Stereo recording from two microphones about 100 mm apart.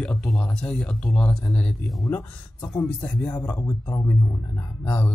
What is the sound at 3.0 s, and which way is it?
Speech, 15° left (ahead or behind).